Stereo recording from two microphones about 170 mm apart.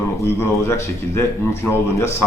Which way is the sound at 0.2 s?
15° left (ahead or behind).